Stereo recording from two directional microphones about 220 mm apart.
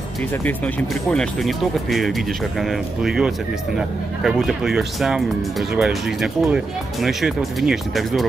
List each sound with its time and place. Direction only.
1.1 s speech: centre (ahead or behind)